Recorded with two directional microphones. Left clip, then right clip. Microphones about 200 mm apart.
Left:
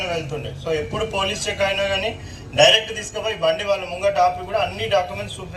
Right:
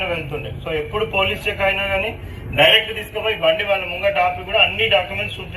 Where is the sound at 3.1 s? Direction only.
35° left (ahead or behind).